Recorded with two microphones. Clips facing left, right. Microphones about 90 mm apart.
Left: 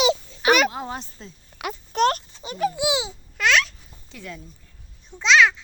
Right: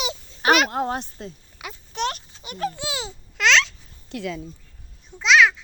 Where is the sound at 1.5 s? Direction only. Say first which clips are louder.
Left 6 dB; 65° left (ahead or behind).